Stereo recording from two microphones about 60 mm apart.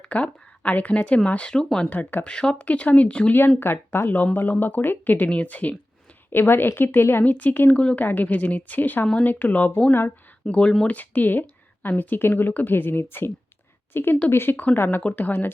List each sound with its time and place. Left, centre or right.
0.1 s speech: left
1.9 s speech: left
2.2 s speech: centre
3.6 s speech: left
6.3 s speech: left
7.3 s speech: left
7.8 s speech: centre
8.0 s speech: left
10.4 s speech: centre
10.8 s a woman's voice: left
14.5 s speech: left